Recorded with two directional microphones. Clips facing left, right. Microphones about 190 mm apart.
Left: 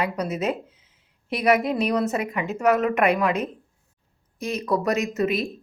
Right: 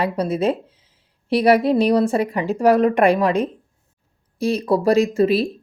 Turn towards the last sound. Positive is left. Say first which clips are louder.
# right 7 dB
turn(degrees=-30)  # may be behind; listen again after turning